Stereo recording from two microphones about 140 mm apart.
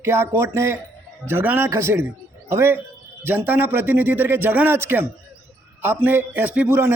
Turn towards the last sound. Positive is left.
turn(degrees=-15)  # may be behind; listen again after turning